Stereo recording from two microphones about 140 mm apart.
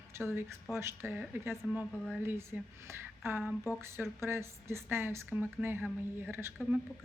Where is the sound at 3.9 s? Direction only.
20° right (ahead or behind).